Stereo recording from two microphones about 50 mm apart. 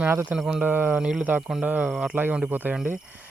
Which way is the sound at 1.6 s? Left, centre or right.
Right.